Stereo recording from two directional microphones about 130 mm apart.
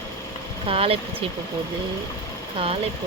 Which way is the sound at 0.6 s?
45° right (ahead or behind).